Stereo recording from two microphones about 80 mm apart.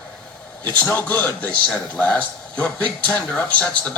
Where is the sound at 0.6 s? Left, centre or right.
Centre.